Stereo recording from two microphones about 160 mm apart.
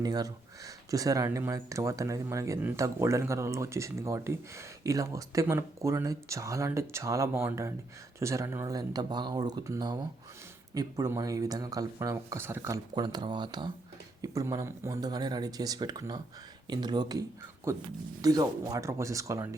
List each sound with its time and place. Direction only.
0.0 s speech: 25° right (ahead or behind)
12.9 s speech: 25° right (ahead or behind)